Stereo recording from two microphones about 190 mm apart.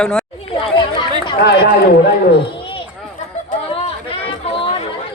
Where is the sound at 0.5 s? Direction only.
25° left (ahead or behind).